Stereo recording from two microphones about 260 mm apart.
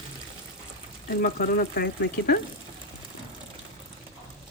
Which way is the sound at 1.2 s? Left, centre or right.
Left.